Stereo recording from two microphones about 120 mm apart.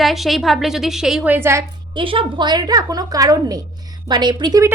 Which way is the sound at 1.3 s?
20° right (ahead or behind).